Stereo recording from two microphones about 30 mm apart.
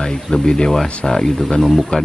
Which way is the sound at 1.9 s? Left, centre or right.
Left.